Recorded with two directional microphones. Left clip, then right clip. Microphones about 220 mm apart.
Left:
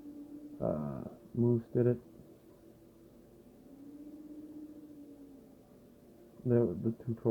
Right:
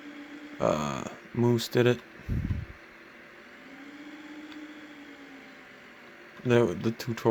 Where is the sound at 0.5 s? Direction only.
40° right (ahead or behind).